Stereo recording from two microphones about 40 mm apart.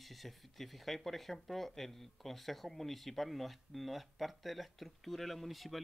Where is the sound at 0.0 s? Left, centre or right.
Centre.